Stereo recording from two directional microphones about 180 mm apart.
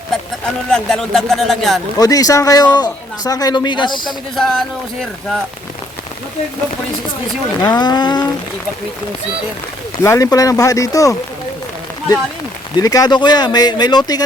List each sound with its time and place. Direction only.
0.4 s speech: 5° left (ahead or behind)
2.0 s speech: 20° left (ahead or behind)
4.4 s speech: centre (ahead or behind)
7.6 s speech: 25° left (ahead or behind)
10.0 s speech: 15° left (ahead or behind)
12.7 s speech: 20° left (ahead or behind)